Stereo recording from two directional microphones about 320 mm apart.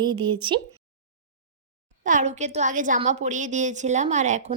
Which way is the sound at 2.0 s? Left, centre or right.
Right.